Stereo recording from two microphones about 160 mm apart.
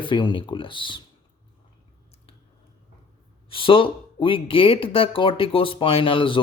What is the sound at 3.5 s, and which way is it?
Speech, 35° left (ahead or behind).